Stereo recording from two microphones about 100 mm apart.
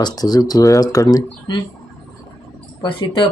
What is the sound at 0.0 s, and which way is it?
Speech, 40° left (ahead or behind).